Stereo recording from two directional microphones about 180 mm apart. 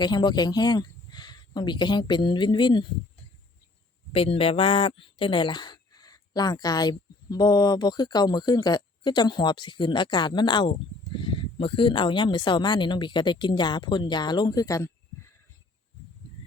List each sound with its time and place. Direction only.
0.0 s speech: 25° left (ahead or behind)
4.1 s speech: 30° left (ahead or behind)